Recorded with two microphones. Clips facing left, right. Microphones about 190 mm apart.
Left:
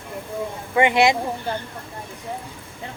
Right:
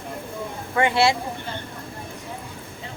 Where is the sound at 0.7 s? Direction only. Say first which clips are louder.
Left 2 dB; 20° left (ahead or behind).